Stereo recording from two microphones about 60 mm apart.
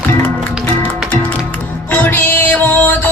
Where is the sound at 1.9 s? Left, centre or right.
Left.